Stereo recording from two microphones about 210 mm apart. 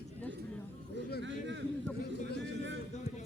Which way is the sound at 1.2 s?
60° right (ahead or behind).